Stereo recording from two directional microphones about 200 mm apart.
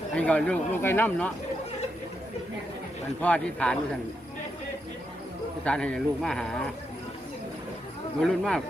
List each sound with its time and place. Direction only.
0.2 s speech: 5° left (ahead or behind)
3.2 s speech: 5° left (ahead or behind)
5.6 s speech: 5° left (ahead or behind)
8.2 s speech: 5° left (ahead or behind)